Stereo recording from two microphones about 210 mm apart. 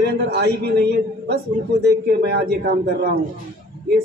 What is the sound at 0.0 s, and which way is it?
Speech, 50° right (ahead or behind).